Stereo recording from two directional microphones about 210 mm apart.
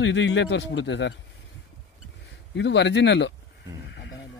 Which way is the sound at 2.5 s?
55° left (ahead or behind).